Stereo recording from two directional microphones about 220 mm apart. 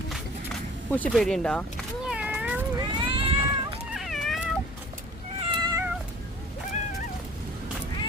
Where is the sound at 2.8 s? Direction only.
25° right (ahead or behind).